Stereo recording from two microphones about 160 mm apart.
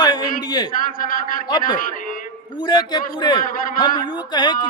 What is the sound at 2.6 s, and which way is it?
A man's voice, 25° left (ahead or behind).